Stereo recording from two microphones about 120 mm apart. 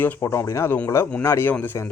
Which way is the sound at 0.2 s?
25° left (ahead or behind).